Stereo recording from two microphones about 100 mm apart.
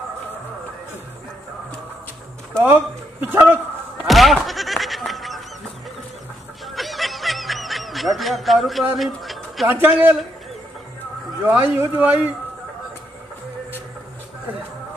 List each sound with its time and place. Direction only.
2.6 s a man's voice: 20° right (ahead or behind)
4.1 s music: centre (ahead or behind)
6.7 s snicker: centre (ahead or behind)
9.7 s speech: 15° right (ahead or behind)
11.4 s speech: 20° right (ahead or behind)